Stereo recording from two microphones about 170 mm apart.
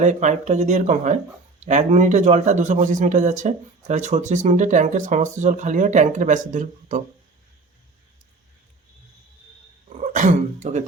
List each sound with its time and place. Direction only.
0.0 s a man's voice: 45° right (ahead or behind)
10.1 s speech: 45° right (ahead or behind)